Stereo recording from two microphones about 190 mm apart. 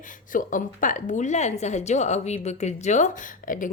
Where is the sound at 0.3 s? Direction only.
45° left (ahead or behind).